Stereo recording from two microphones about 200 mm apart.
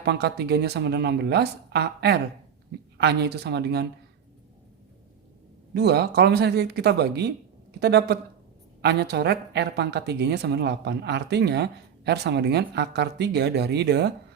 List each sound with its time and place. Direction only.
0.0 s a woman's voice: 55° right (ahead or behind)
5.7 s a woman's voice: 55° right (ahead or behind)